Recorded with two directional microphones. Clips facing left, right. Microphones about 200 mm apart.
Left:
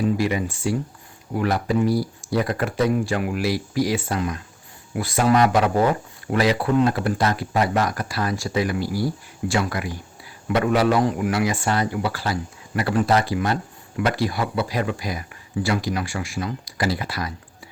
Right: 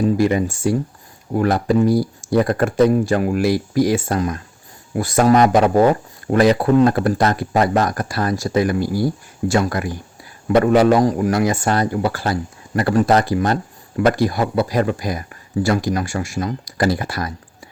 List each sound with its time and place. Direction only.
0.2 s speech: 45° right (ahead or behind)